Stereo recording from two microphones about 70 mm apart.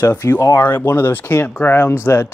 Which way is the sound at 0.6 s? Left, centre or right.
Left.